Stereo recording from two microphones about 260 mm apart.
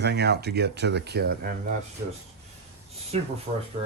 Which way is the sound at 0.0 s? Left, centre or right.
Right.